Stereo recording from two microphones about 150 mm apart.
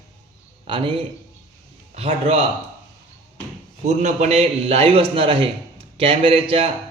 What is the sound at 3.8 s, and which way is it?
A man's voice, 50° right (ahead or behind).